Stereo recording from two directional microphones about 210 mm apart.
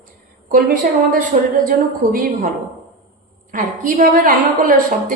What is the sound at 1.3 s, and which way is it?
Speech, 35° right (ahead or behind).